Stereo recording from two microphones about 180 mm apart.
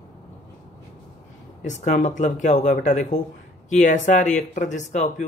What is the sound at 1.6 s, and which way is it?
Speech, 40° left (ahead or behind).